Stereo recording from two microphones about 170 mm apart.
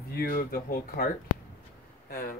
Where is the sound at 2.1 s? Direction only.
60° left (ahead or behind).